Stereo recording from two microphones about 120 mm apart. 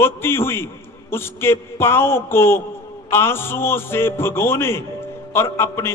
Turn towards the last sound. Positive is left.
turn(degrees=20)  # may be behind; listen again after turning